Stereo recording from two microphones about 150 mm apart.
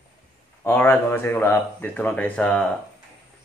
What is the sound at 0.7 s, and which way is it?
Speech, 15° left (ahead or behind).